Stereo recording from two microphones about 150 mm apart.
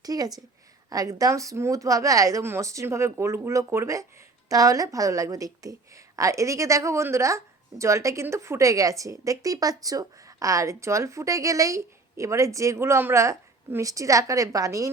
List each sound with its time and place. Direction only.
0.0 s a woman's voice: 25° right (ahead or behind)